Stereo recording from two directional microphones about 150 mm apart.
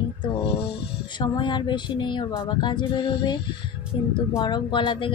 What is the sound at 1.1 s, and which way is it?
Speech, 30° left (ahead or behind).